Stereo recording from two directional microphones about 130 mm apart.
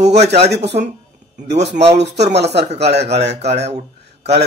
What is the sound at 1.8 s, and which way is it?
A man's voice, 55° right (ahead or behind).